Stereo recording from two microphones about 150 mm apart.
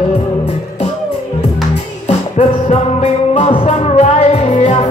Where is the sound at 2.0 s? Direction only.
50° left (ahead or behind).